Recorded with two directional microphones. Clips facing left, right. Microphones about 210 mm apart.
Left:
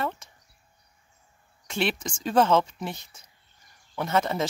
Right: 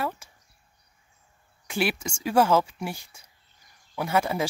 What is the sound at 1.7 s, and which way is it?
Speech, 10° right (ahead or behind).